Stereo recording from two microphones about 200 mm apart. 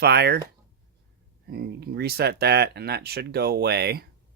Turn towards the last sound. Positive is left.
turn(degrees=-55)  # may be behind; listen again after turning